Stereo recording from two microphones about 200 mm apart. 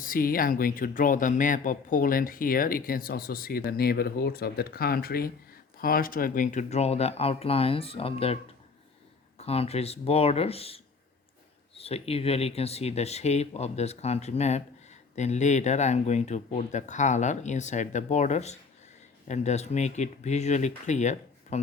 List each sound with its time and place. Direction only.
0.0 s speech: 45° left (ahead or behind); by 8.4 s 30° left (ahead or behind)
9.4 s speech: 30° left (ahead or behind)